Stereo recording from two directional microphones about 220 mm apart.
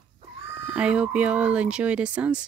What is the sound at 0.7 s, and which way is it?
Speech, 5° right (ahead or behind).